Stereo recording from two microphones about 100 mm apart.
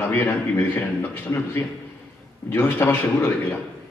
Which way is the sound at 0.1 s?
20° left (ahead or behind).